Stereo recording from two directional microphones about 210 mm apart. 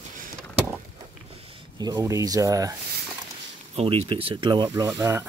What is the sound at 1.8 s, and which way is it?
Speech, 20° right (ahead or behind).